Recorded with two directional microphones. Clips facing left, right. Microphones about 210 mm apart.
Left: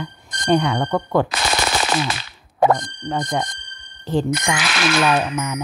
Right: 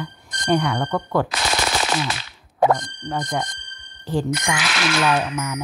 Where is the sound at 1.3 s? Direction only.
55° left (ahead or behind).